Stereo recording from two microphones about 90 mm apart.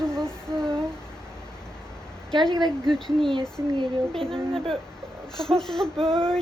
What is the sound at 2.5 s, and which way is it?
Speech, 50° right (ahead or behind).